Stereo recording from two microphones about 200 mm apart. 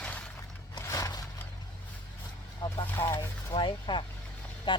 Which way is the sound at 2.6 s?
20° left (ahead or behind).